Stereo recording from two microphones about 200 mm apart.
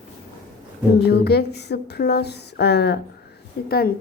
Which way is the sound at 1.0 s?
55° left (ahead or behind).